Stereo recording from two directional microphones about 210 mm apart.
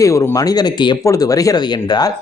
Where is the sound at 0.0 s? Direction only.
15° left (ahead or behind).